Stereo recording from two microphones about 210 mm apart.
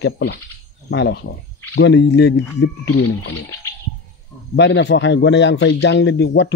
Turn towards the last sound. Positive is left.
turn(degrees=55)  # may be behind; listen again after turning